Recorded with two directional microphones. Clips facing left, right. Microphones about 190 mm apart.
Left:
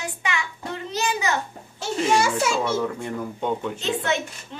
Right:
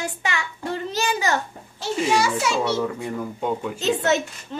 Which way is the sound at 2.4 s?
5° left (ahead or behind).